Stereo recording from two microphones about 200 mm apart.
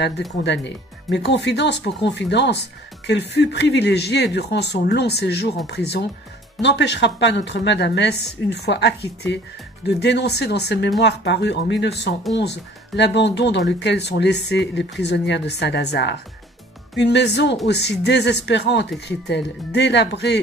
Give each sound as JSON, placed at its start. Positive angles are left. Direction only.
{"t": 0.4, "sound": "speech", "side_deg": 60}